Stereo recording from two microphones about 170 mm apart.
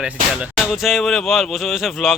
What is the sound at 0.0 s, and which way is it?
Speech, 5° right (ahead or behind).